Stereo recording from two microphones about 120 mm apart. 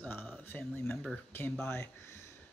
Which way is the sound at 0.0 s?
15° left (ahead or behind).